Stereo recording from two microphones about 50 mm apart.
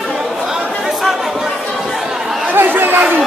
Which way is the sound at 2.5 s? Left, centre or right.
Right.